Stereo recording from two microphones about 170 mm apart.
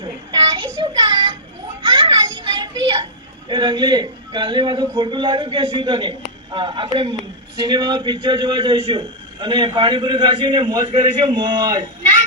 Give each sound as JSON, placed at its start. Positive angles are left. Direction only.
{"t": 0.0, "sound": "child singing", "side_deg": -25}
{"t": 1.8, "sound": "children playing", "side_deg": -30}
{"t": 2.6, "sound": "a sound", "side_deg": -25}
{"t": 3.5, "sound": "a man's voice", "side_deg": -25}